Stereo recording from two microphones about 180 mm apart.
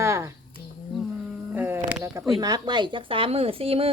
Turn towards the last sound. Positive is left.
turn(degrees=-30)  # may be behind; listen again after turning